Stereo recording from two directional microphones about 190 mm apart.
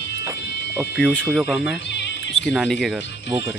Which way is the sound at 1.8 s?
65° left (ahead or behind).